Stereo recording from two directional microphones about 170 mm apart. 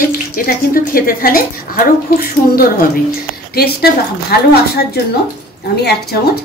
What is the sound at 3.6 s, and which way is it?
Speech, 65° left (ahead or behind).